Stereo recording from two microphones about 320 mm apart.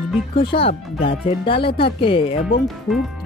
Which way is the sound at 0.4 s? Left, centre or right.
Centre.